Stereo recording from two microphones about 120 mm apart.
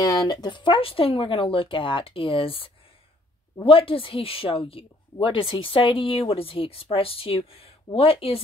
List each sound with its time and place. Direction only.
0.0 s a woman's voice: 35° left (ahead or behind); by 8.4 s 50° left (ahead or behind)